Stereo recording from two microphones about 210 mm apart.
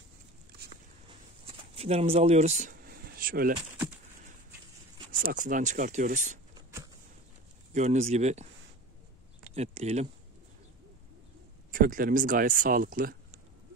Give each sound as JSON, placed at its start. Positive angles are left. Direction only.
{"t": 1.0, "sound": "a sound", "side_deg": -25}
{"t": 5.2, "sound": "speech", "side_deg": -40}
{"t": 6.5, "sound": "a sound", "side_deg": -15}
{"t": 7.7, "sound": "speech", "side_deg": -35}
{"t": 9.5, "sound": "speech", "side_deg": -30}
{"t": 11.7, "sound": "speech", "side_deg": -40}